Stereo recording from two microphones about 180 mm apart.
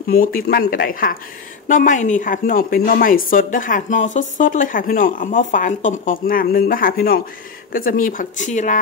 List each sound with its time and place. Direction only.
0.1 s a woman's voice: 55° left (ahead or behind)